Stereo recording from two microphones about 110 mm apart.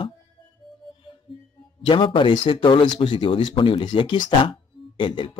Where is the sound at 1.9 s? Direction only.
50° left (ahead or behind).